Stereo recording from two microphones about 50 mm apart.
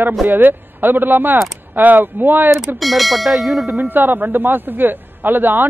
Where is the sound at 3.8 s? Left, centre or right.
Right.